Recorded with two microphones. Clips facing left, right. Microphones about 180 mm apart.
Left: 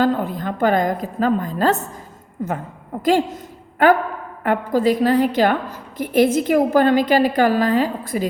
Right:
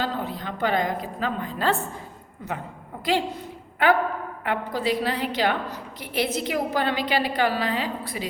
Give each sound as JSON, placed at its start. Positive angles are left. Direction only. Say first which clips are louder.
{"t": 0.0, "sound": "a woman's voice", "louder": "left 9 dB", "side_deg": 50}